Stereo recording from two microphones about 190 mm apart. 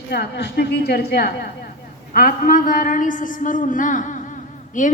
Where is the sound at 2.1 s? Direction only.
45° left (ahead or behind).